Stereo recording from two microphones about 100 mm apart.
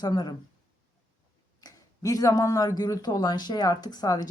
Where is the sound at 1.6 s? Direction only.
35° left (ahead or behind).